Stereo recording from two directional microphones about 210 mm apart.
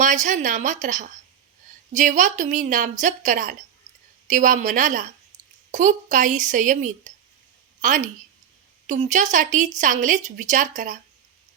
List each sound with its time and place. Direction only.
0.0 s a woman's voice: 35° right (ahead or behind)